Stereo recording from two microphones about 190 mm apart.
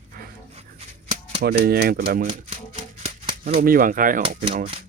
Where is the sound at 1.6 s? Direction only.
55° right (ahead or behind).